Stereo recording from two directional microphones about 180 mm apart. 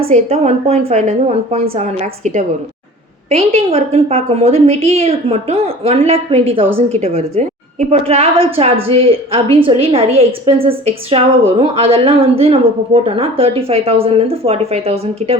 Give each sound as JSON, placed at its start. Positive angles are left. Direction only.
{"t": 0.0, "sound": "a woman's voice", "side_deg": -35}